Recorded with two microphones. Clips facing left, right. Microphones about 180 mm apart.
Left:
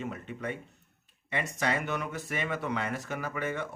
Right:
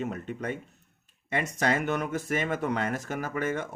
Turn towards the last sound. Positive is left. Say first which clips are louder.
# right 3 dB
turn(degrees=-45)  # may be behind; listen again after turning